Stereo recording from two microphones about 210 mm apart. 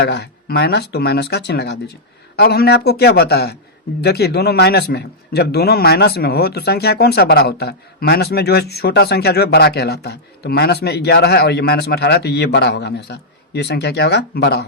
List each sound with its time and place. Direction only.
0.0 s a man's voice: 50° left (ahead or behind)